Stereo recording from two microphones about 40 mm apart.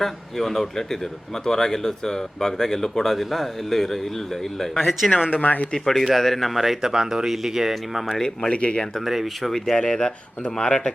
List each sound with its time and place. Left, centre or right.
0.0 s speech: centre
5.4 s speech: left
5.7 s speech: centre
8.2 s speech: centre
8.5 s speech: left
9.0 s speech: centre
9.7 s speech: centre